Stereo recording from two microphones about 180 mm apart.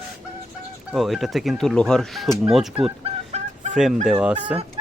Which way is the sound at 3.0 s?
40° right (ahead or behind).